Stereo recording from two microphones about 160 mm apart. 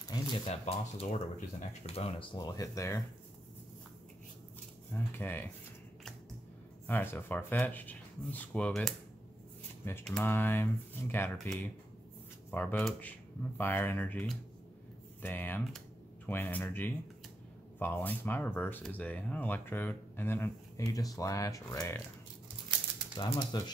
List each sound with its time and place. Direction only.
0.1 s a sound: 25° left (ahead or behind)
0.5 s speech: 40° left (ahead or behind)
2.3 s speech: 20° left (ahead or behind)
4.9 s speech: 15° left (ahead or behind)
6.9 s speech: 10° left (ahead or behind)
10.0 s speech: 10° left (ahead or behind)
11.3 s speech: 5° left (ahead or behind)
23.1 s speech: 30° left (ahead or behind)